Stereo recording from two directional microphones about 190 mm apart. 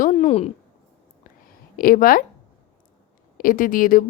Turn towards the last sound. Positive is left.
turn(degrees=45)  # may be behind; listen again after turning